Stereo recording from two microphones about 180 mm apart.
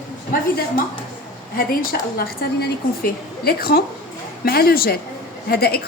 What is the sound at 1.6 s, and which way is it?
A woman's voice, 55° left (ahead or behind).